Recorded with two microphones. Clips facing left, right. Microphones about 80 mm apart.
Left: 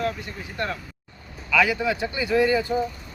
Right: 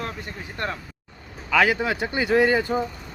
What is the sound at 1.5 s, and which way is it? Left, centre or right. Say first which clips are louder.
A man's voice: right 1 dB; right.